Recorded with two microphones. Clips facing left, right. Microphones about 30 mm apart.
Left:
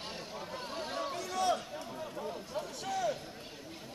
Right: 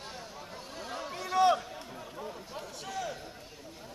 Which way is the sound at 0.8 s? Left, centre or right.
Centre.